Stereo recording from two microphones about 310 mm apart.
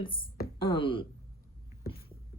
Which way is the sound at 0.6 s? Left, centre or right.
Centre.